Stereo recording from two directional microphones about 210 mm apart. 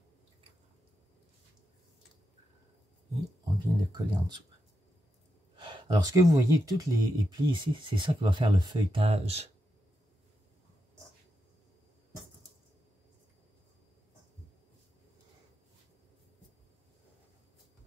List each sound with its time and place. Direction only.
3.4 s speech: 20° right (ahead or behind)
5.6 s speech: 20° right (ahead or behind)